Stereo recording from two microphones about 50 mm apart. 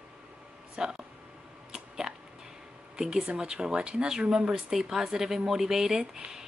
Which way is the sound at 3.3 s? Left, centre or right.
Centre.